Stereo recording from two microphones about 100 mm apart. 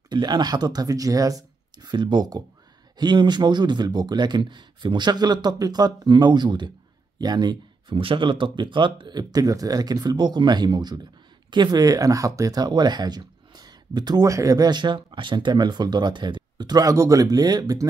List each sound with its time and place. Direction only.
0.1 s speech: 45° right (ahead or behind)